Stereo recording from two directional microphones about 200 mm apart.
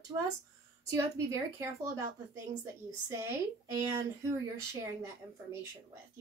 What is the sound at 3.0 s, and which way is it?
Speech, 15° right (ahead or behind).